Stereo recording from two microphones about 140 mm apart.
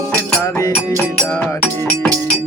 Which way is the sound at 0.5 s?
20° left (ahead or behind).